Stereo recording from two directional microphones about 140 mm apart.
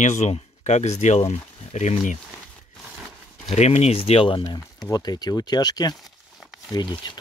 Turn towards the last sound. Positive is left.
turn(degrees=30)  # may be behind; listen again after turning